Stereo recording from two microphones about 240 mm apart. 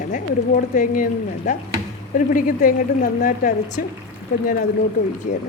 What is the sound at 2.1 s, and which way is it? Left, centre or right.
A woman's voice, left.